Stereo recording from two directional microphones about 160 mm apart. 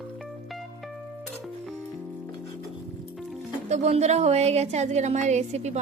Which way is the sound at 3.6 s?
45° right (ahead or behind).